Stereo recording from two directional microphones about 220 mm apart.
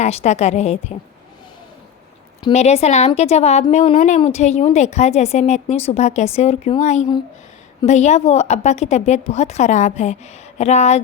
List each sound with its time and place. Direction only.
0.0 s speech: 30° left (ahead or behind)
2.4 s speech: 30° left (ahead or behind)